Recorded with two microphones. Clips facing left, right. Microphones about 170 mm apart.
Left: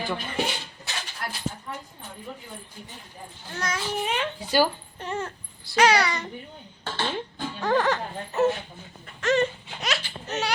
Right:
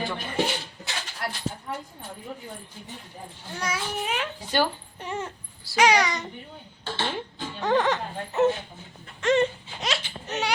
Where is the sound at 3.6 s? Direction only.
5° right (ahead or behind).